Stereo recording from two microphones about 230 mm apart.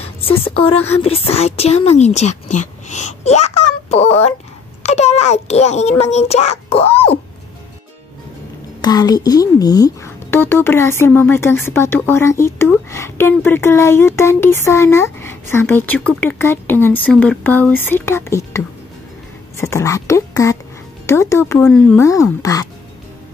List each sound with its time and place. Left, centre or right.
0.0 s speech: left
8.8 s speech: centre